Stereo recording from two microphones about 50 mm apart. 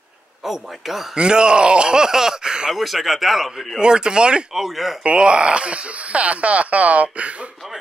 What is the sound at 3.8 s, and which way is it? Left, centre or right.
Speech, centre.